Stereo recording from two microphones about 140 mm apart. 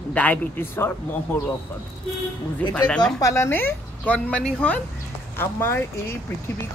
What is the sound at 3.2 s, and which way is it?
A woman's voice, 20° left (ahead or behind).